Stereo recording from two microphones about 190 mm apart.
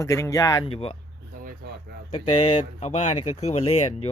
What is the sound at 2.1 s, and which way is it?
Speech, 35° left (ahead or behind).